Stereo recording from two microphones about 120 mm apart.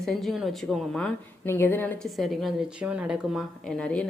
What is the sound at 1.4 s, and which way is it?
Speech, 20° left (ahead or behind).